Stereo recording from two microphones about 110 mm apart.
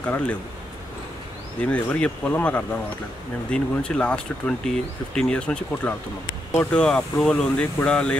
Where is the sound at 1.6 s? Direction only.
10° left (ahead or behind).